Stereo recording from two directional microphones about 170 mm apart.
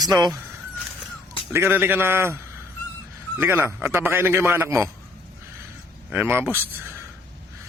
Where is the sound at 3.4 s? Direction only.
15° right (ahead or behind).